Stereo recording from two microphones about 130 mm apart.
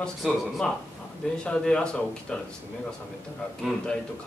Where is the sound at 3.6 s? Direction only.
5° left (ahead or behind).